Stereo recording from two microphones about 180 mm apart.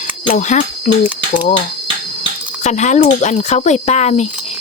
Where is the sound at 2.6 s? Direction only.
40° left (ahead or behind).